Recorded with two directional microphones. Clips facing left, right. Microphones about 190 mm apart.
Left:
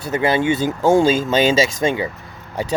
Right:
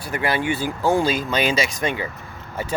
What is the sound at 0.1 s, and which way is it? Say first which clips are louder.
Speech: left 5 dB; 25° left (ahead or behind).